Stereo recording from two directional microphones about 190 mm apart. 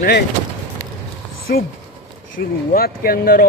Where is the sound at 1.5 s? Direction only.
55° left (ahead or behind).